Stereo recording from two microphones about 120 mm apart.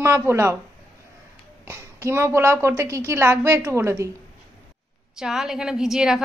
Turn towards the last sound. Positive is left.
turn(degrees=-5)  # may be behind; listen again after turning